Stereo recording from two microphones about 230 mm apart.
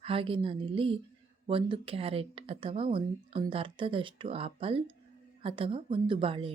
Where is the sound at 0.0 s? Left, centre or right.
Right.